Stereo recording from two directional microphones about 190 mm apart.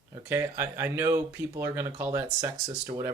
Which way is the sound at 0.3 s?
15° right (ahead or behind).